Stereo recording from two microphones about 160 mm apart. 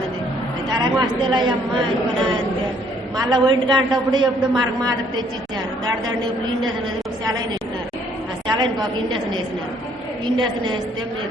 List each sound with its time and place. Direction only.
0.9 s a woman's voice: 30° right (ahead or behind)
3.2 s a woman's voice: 25° right (ahead or behind)
8.4 s a woman's voice: 25° right (ahead or behind)